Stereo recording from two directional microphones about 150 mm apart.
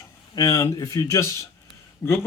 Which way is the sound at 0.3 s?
20° left (ahead or behind).